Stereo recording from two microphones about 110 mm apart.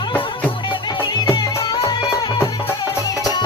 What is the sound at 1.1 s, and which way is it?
Music, 40° left (ahead or behind).